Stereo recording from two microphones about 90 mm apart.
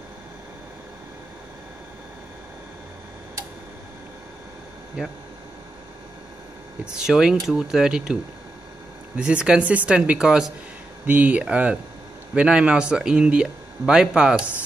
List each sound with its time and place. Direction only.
6.8 s speech: 10° right (ahead or behind)